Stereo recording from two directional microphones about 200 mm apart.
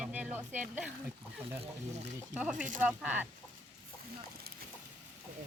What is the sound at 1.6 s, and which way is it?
Speech, 35° right (ahead or behind).